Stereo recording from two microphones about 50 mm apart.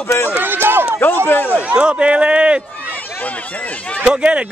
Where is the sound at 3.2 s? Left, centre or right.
Left.